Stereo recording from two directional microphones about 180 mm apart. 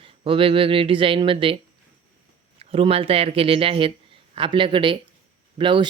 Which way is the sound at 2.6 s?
30° right (ahead or behind).